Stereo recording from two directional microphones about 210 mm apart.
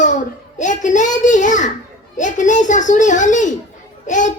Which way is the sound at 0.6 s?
35° left (ahead or behind).